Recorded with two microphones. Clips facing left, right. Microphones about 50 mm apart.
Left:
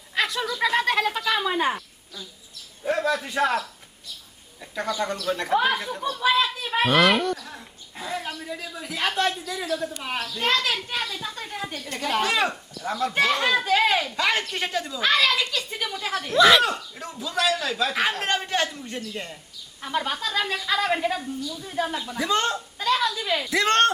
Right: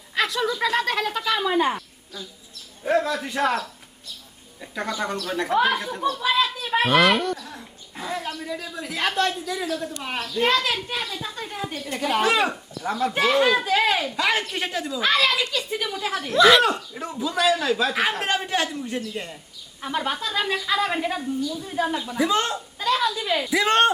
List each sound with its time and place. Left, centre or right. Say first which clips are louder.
0.2 s a sound: right 1 dB; centre
0.6 s a child's voice: left 4 dB; centre
2.8 s a child's voice: right 2 dB; centre
4.6 s a child's voice: even; centre